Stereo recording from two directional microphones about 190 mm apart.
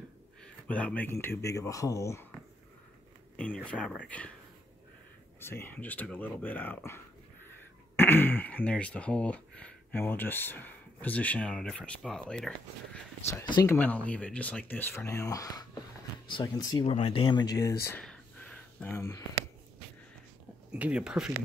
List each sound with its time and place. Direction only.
0.4 s speech: 5° left (ahead or behind)
3.6 s speech: 5° left (ahead or behind)
5.4 s speech: 10° left (ahead or behind)
13.3 s speech: 20° left (ahead or behind)
13.7 s speech: 5° left (ahead or behind)
18.0 s a sound: 5° left (ahead or behind)
20.7 s speech: 5° right (ahead or behind)